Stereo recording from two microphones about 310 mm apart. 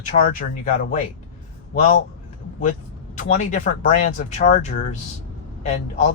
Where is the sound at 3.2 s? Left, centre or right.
Left.